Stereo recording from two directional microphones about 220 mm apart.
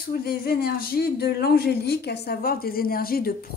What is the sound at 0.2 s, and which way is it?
Speech, 45° left (ahead or behind).